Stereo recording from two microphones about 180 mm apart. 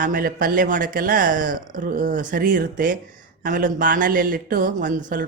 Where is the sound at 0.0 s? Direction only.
50° right (ahead or behind).